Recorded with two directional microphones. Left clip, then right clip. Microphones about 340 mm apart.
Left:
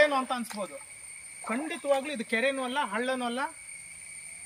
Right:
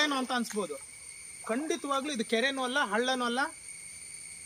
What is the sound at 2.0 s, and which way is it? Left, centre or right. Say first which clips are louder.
Speech: even; centre.